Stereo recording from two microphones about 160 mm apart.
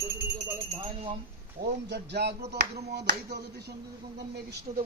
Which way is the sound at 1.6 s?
90° right.